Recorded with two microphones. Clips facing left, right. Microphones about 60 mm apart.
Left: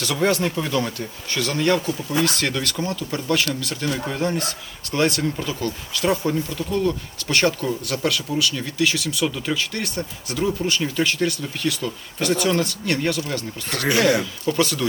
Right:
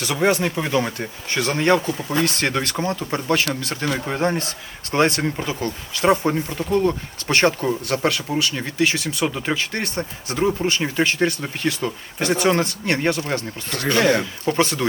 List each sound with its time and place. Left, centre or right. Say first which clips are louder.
0.0 s speech: right 1 dB; centre
14.4 s speech: right 2 dB; right